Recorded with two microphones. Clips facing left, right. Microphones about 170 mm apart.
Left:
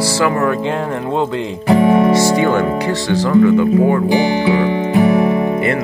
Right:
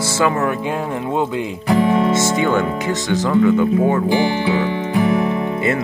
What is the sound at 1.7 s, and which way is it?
Music, 20° left (ahead or behind).